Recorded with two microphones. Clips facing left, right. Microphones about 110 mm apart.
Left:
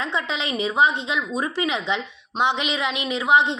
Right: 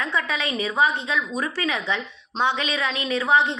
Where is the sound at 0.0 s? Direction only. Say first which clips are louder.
Even; 20° left (ahead or behind).